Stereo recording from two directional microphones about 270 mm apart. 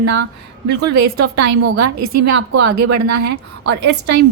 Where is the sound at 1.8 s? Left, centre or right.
Right.